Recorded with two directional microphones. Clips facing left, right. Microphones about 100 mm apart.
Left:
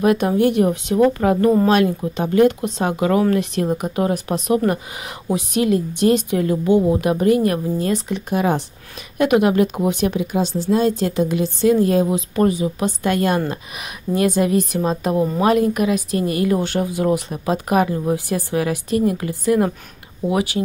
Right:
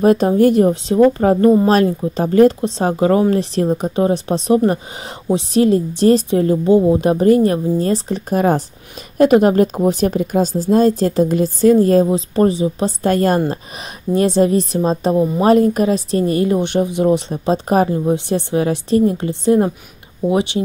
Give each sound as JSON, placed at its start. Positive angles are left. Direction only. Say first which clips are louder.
{"t": 0.0, "sound": "a woman's voice", "louder": "right 4 dB", "side_deg": -35}